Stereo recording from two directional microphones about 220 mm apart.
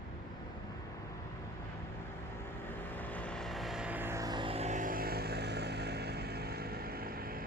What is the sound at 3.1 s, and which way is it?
Music, 5° left (ahead or behind).